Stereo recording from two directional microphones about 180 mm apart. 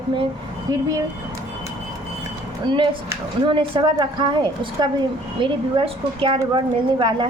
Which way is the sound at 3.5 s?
30° right (ahead or behind).